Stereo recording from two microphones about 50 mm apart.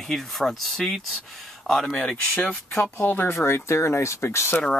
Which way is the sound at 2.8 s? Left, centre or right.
Left.